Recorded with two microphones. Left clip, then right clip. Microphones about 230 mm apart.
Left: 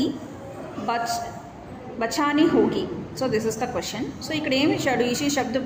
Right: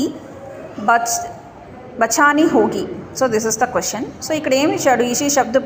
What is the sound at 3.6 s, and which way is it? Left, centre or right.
A woman's voice, centre.